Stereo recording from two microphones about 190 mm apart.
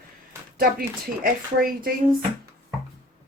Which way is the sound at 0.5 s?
50° right (ahead or behind).